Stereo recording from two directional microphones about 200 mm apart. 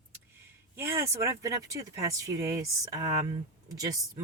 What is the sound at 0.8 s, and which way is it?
Speech, 15° right (ahead or behind).